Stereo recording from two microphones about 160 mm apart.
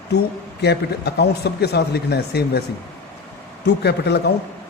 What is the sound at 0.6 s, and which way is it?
Speech, 90° left.